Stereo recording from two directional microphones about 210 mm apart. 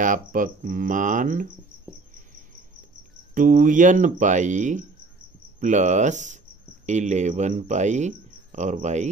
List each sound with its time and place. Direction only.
0.0 s speech: 40° right (ahead or behind)
3.3 s speech: 40° right (ahead or behind)